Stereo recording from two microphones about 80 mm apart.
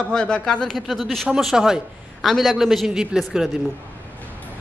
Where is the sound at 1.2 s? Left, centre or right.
Centre.